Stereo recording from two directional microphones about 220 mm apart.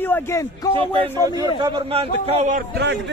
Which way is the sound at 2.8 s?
55° right (ahead or behind).